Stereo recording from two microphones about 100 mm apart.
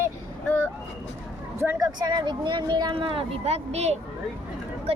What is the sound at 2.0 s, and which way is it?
Speech, 45° right (ahead or behind).